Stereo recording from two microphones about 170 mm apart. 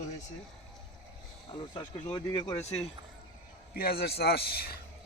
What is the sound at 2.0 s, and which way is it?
Speech, 25° left (ahead or behind).